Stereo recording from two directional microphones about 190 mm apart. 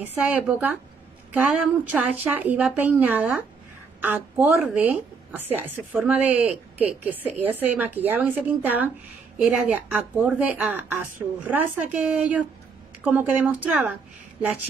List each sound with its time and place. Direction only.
0.0 s speech: 10° right (ahead or behind)